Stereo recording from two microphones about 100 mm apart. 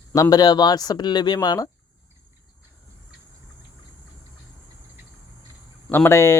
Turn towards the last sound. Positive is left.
turn(degrees=25)  # may be behind; listen again after turning